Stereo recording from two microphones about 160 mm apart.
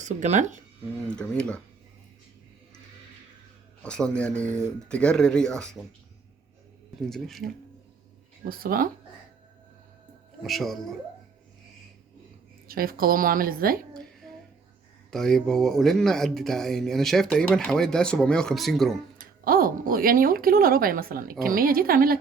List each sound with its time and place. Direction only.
0.0 s speech: 50° right (ahead or behind)
1.0 s speech: 5° left (ahead or behind)
3.8 s speech: 5° left (ahead or behind)
7.0 s speech: centre (ahead or behind)
8.4 s speech: 65° right (ahead or behind)
10.4 s speech: centre (ahead or behind)
12.6 s speech: 65° right (ahead or behind)
13.9 s music: 5° left (ahead or behind)
15.1 s speech: 5° left (ahead or behind)
19.2 s speech: 65° right (ahead or behind)